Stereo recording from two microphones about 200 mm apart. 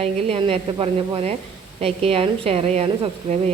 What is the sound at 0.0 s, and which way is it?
A woman's voice, 30° right (ahead or behind).